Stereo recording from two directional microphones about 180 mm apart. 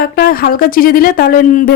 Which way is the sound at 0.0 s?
55° left (ahead or behind).